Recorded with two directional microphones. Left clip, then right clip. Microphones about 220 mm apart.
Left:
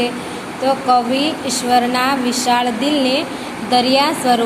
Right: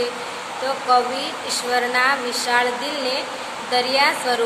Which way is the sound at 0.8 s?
15° left (ahead or behind).